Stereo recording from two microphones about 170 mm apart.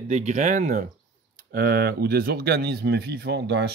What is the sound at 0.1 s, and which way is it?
Speech, 45° right (ahead or behind).